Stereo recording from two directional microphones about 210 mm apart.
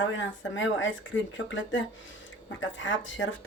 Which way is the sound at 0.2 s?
60° left (ahead or behind).